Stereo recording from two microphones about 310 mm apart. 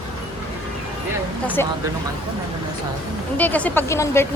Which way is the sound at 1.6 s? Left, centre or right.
Centre.